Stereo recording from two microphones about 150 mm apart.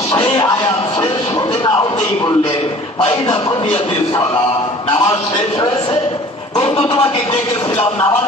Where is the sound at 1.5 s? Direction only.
30° left (ahead or behind).